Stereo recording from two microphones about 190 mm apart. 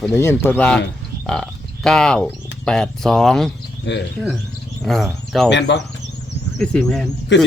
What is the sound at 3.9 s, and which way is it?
Speech, 65° left (ahead or behind).